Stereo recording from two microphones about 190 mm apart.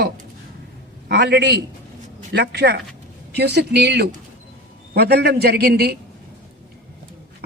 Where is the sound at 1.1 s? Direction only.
60° right (ahead or behind).